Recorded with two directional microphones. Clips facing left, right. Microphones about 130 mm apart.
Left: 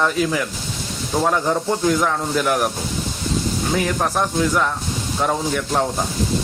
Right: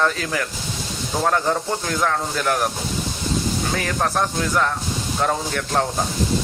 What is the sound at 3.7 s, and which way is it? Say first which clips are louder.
Speech: left 3 dB; 10° left (ahead or behind).